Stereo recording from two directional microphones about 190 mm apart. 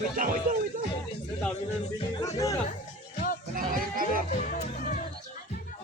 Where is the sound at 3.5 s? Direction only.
50° right (ahead or behind).